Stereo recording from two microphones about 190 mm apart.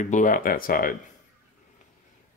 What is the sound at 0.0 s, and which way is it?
Speech, 40° left (ahead or behind).